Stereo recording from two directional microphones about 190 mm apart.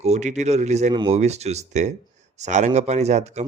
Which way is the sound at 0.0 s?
35° right (ahead or behind).